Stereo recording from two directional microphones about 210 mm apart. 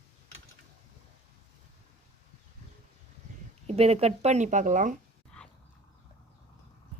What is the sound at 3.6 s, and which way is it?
Speech, 30° right (ahead or behind).